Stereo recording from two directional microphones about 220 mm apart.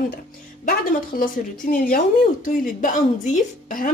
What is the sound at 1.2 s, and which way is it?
A woman's voice, 40° left (ahead or behind).